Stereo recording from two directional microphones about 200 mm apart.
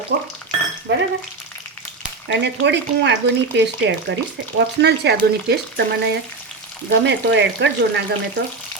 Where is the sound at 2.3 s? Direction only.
60° right (ahead or behind).